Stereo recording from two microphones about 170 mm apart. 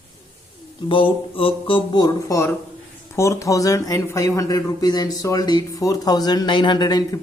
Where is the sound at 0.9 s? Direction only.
30° left (ahead or behind).